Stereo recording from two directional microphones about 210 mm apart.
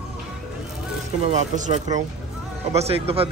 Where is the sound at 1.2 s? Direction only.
35° right (ahead or behind).